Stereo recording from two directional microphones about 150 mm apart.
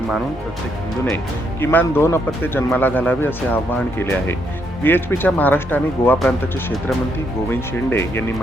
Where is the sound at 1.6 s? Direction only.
15° left (ahead or behind).